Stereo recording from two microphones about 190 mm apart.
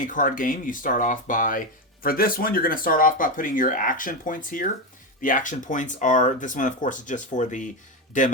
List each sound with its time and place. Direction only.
0.0 s speech: 45° left (ahead or behind)